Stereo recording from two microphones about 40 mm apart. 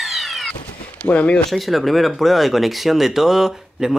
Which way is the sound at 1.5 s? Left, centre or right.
Centre.